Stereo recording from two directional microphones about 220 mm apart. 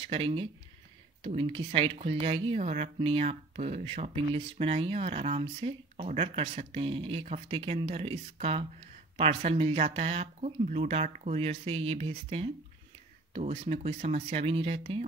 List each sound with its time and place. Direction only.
0.0 s speech: 25° right (ahead or behind)